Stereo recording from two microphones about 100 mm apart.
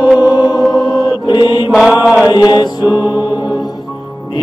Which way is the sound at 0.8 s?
45° left (ahead or behind).